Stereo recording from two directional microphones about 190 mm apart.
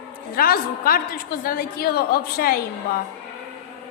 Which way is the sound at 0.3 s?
50° left (ahead or behind).